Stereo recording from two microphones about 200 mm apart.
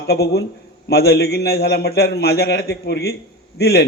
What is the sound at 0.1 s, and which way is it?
A man's voice, 55° left (ahead or behind).